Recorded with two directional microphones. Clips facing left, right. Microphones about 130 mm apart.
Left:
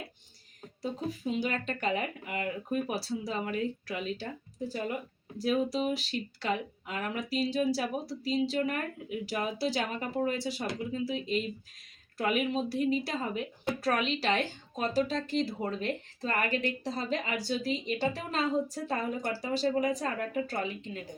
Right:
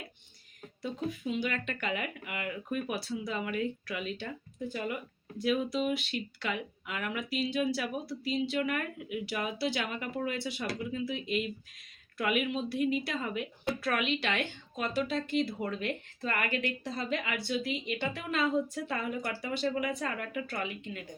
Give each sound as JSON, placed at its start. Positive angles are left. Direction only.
{"t": 0.8, "sound": "speech", "side_deg": 35}